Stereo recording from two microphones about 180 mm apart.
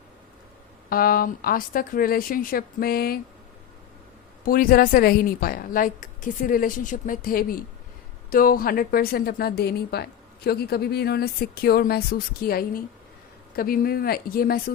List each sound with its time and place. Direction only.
0.9 s a woman's voice: 55° left (ahead or behind)
4.4 s a woman's voice: 55° left (ahead or behind)